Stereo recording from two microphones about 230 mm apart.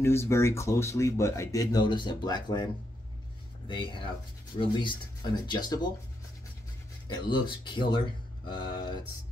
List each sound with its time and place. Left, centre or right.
0.0 s speech: centre
7.1 s speech: centre